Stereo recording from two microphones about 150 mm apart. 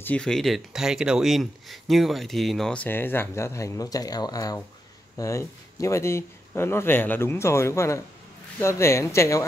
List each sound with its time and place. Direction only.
0.0 s speech: 5° left (ahead or behind)